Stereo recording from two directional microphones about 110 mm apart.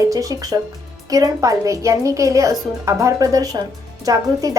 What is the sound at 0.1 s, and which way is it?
A woman's voice, 30° right (ahead or behind).